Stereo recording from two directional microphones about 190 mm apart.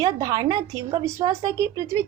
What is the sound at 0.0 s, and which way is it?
A woman's voice, 20° right (ahead or behind).